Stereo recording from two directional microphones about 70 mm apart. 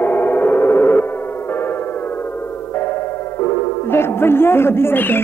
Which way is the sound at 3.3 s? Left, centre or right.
Left.